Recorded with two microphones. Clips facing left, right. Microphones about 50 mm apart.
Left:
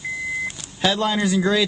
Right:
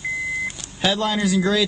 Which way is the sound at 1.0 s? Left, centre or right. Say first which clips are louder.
Even; centre.